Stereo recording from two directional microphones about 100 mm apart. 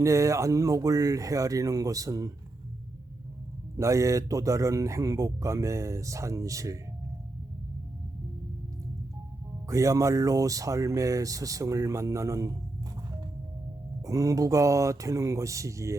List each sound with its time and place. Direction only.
0.0 s speech: 30° right (ahead or behind)
3.8 s speech: 30° right (ahead or behind)
9.6 s speech: 35° right (ahead or behind)
14.0 s speech: 35° right (ahead or behind)